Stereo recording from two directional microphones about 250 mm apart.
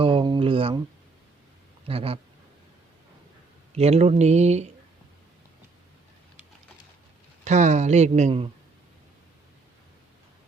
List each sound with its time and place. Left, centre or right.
0.0 s a sound: centre
1.9 s speech: right
3.8 s speech: right
7.4 s speech: right